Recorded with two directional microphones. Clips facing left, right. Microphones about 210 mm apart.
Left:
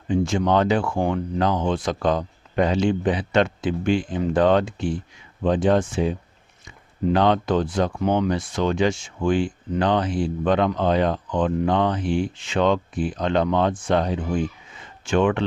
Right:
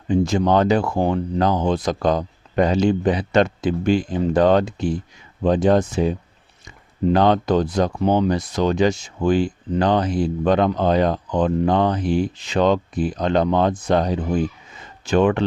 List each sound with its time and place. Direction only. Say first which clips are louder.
0.1 s speech: right 3 dB; 40° right (ahead or behind)